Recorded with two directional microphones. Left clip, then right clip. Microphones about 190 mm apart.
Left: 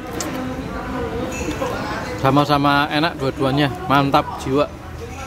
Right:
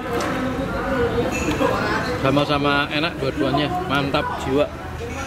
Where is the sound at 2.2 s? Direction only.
30° left (ahead or behind).